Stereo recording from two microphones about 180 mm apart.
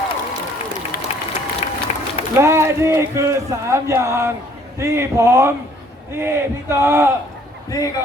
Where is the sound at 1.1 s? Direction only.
35° left (ahead or behind).